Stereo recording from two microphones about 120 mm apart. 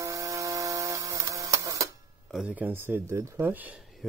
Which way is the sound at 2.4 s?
15° right (ahead or behind).